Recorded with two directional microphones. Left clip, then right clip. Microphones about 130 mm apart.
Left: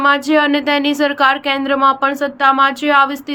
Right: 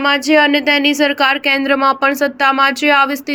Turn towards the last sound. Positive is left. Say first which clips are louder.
# even
turn(degrees=-25)  # may be behind; listen again after turning